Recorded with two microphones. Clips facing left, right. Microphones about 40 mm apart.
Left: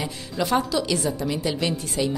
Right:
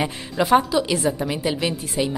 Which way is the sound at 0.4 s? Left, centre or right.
Right.